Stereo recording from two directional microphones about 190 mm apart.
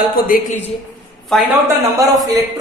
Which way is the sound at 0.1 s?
50° left (ahead or behind).